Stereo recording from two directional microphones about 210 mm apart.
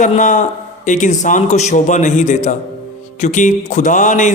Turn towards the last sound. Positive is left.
turn(degrees=35)  # may be behind; listen again after turning